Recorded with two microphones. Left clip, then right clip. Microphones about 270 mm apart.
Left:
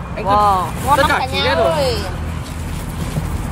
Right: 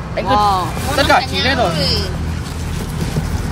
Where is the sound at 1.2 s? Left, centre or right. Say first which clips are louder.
Left 1 dB; centre.